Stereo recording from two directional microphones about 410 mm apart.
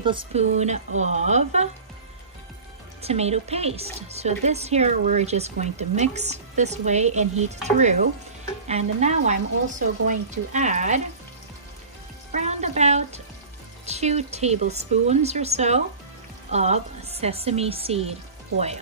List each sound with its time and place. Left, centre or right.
0.0 s a woman's voice: centre
3.0 s a woman's voice: centre
12.3 s music: centre
13.8 s a woman's voice: centre